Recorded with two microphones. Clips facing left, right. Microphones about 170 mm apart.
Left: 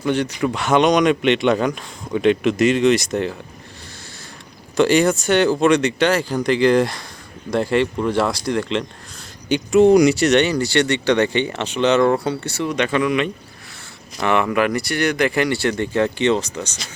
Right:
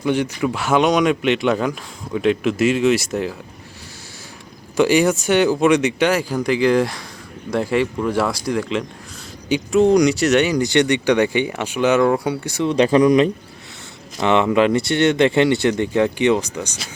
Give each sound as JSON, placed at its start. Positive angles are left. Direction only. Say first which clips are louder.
{"t": 0.0, "sound": "speech", "louder": "even", "side_deg": -10}
{"t": 4.8, "sound": "speech", "louder": "even", "side_deg": -10}
{"t": 12.6, "sound": "speech", "louder": "right 6 dB", "side_deg": -35}
{"t": 14.2, "sound": "speech", "louder": "right 3 dB", "side_deg": -20}